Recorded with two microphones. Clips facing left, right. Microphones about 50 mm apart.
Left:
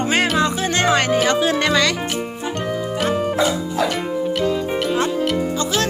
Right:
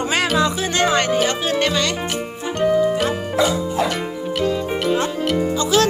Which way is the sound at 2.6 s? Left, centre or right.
Centre.